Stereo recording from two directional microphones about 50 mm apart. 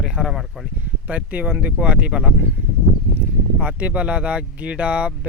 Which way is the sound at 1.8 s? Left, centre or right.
Right.